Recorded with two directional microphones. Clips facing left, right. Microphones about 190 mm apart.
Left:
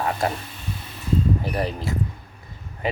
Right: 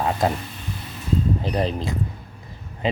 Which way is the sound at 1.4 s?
20° right (ahead or behind).